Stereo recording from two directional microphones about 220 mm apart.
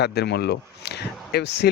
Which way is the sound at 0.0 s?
50° left (ahead or behind).